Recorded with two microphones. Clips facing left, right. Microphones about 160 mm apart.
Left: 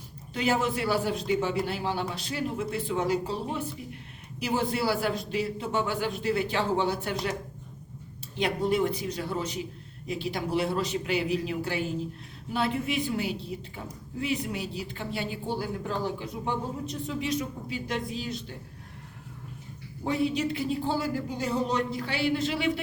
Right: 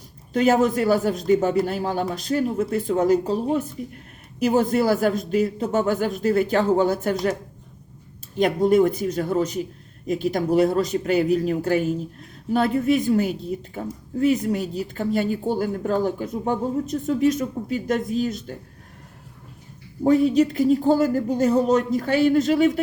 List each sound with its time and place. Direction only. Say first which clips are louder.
0.3 s speech: right 9 dB; 45° right (ahead or behind)
8.4 s speech: right 9 dB; 45° right (ahead or behind)
20.1 s speech: right 10 dB; 40° right (ahead or behind)